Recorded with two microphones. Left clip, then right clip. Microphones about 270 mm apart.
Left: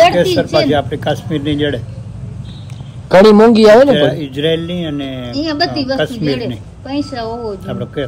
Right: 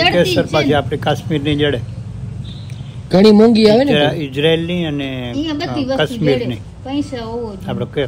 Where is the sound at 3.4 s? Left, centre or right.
Centre.